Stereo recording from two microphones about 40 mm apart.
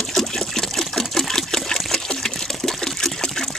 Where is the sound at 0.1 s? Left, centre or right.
Centre.